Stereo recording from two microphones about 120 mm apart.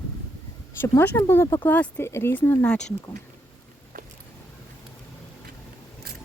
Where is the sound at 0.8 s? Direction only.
20° left (ahead or behind).